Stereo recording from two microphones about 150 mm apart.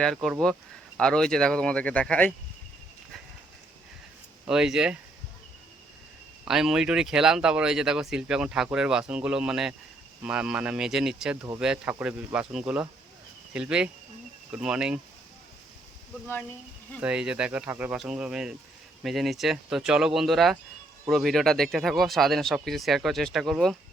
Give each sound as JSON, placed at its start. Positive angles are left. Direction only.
{"t": 0.0, "sound": "speech", "side_deg": 0}
{"t": 4.4, "sound": "speech", "side_deg": -5}
{"t": 6.4, "sound": "speech", "side_deg": -5}
{"t": 17.0, "sound": "speech", "side_deg": -5}